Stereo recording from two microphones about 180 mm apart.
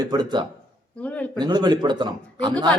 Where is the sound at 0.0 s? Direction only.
20° right (ahead or behind).